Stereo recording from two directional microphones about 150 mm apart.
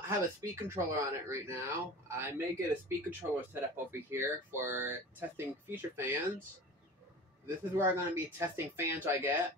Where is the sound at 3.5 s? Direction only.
15° right (ahead or behind).